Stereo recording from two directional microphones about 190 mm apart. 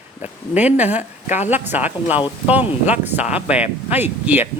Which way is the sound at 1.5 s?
10° right (ahead or behind).